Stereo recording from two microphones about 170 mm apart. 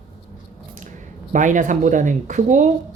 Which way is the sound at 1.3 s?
50° right (ahead or behind).